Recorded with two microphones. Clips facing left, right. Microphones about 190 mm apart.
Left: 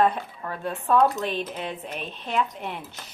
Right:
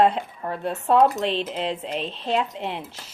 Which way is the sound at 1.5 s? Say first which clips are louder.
Right 5 dB; 80° right.